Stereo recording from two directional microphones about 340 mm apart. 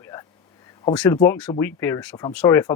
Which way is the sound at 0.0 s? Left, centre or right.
Centre.